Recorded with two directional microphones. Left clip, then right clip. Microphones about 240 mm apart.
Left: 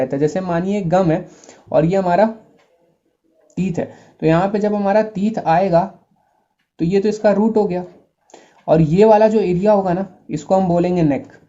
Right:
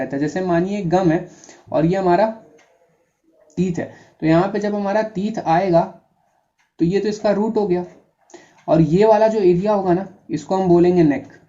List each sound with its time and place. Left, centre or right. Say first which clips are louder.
0.0 s a man's voice: left 4 dB; left
3.5 s a man's voice: left 1 dB; left